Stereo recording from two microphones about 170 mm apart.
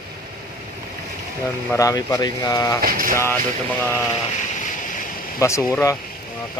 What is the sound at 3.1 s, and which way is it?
Speech, 15° left (ahead or behind).